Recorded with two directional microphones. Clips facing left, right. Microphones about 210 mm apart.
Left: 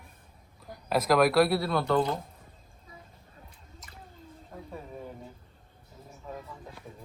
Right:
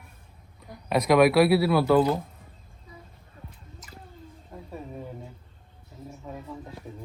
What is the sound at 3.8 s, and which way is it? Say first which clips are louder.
Drip: right 4 dB; centre (ahead or behind).